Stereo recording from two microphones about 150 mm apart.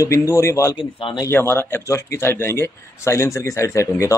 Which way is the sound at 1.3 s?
15° left (ahead or behind).